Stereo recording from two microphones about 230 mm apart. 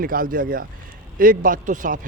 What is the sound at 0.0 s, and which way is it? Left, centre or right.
Speech, right.